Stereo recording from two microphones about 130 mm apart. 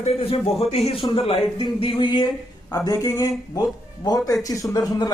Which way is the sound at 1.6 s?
40° left (ahead or behind).